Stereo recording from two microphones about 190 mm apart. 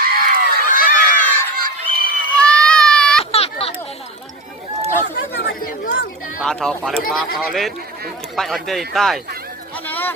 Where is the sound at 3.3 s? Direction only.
30° left (ahead or behind).